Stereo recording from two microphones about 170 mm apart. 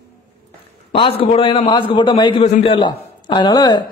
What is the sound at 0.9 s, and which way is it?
A man's voice, 35° left (ahead or behind).